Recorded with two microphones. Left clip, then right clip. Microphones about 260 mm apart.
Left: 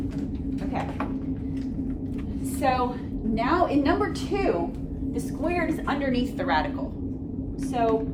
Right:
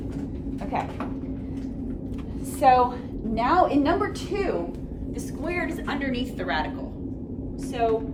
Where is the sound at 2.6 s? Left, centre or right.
Centre.